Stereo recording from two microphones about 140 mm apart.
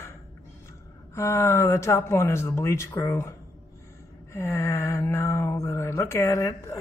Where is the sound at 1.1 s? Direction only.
20° left (ahead or behind).